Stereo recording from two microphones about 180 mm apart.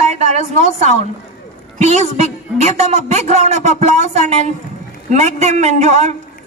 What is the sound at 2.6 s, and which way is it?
A woman's voice, 40° right (ahead or behind).